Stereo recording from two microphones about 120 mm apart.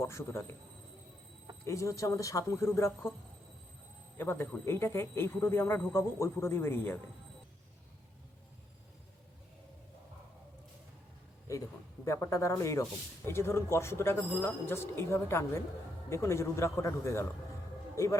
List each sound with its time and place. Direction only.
0.0 s speech: 20° left (ahead or behind)
1.6 s speech: 25° left (ahead or behind)
4.2 s speech: 20° left (ahead or behind)
11.5 s a man's voice: 25° left (ahead or behind)